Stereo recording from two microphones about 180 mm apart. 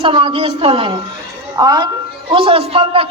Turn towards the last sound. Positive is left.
turn(degrees=-35)  # may be behind; listen again after turning